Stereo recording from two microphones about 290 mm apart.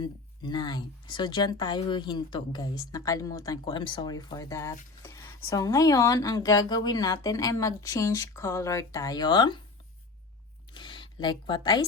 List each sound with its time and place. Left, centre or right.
0.0 s speech: centre
10.7 s speech: centre